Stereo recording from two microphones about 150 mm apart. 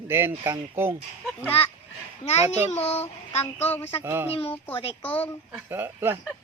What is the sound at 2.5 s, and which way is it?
Child singing, 45° left (ahead or behind).